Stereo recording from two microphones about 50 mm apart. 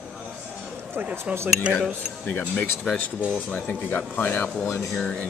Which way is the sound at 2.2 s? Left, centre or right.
Left.